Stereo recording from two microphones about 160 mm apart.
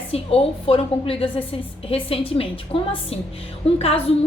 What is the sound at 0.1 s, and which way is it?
A woman's voice, 35° left (ahead or behind).